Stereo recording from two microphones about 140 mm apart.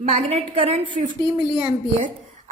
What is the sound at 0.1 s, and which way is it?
Speech, 45° right (ahead or behind).